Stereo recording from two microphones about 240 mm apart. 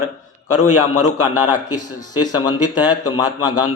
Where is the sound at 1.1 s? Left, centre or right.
Left.